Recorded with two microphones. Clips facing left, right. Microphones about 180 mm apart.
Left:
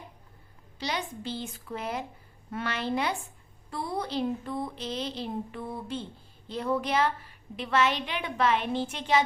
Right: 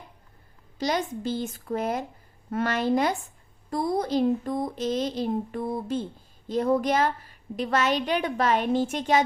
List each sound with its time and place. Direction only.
0.8 s a woman's voice: 45° right (ahead or behind)